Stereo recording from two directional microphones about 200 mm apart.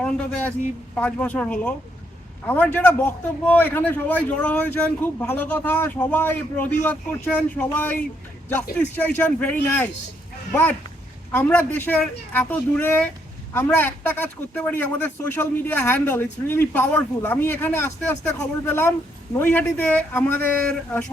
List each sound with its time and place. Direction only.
0.9 s a man's voice: 5° left (ahead or behind)